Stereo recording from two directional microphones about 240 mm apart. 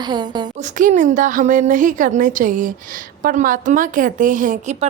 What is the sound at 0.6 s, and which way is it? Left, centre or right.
A woman's voice, right.